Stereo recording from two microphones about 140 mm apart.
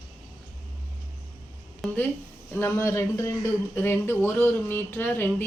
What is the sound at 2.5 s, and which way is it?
Speech, 20° left (ahead or behind).